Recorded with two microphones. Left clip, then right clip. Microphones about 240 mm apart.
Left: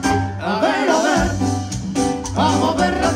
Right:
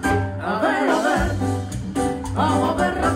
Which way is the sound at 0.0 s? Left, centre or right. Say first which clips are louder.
Left 2 dB; left.